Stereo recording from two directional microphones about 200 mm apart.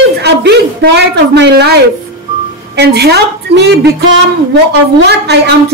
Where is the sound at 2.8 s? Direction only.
55° right (ahead or behind).